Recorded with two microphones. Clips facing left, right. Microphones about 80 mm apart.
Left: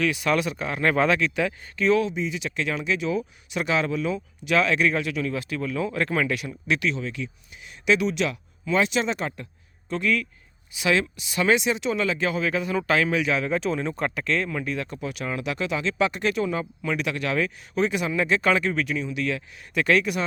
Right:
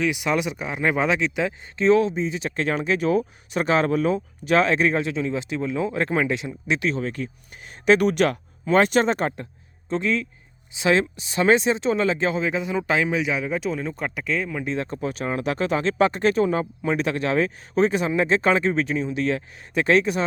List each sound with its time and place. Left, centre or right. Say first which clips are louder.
0.0 s speech: even; centre; by 9.3 s right
9.9 s speech: right 1 dB; right; by 14.6 s centre
14.6 s speech: right 3 dB; right